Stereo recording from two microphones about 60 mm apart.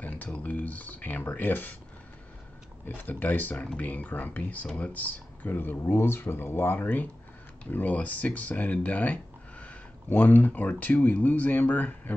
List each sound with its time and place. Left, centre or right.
0.0 s speech: left
3.0 s speech: left